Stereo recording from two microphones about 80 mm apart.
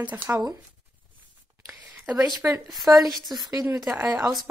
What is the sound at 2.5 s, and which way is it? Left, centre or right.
Speech, centre.